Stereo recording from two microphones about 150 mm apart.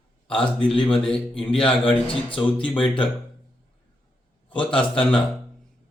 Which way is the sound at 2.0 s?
35° left (ahead or behind).